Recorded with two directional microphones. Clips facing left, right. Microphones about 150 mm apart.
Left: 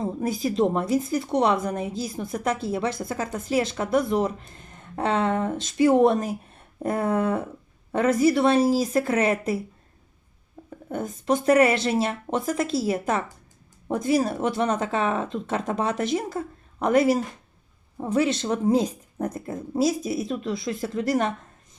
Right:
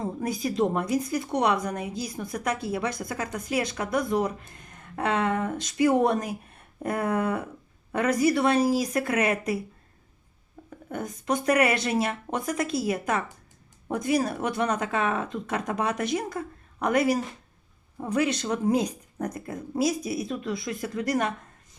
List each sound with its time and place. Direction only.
0.0 s a woman's voice: 25° left (ahead or behind)
10.9 s a woman's voice: 25° left (ahead or behind)